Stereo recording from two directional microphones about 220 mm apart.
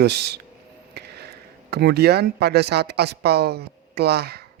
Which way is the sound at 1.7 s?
45° right (ahead or behind).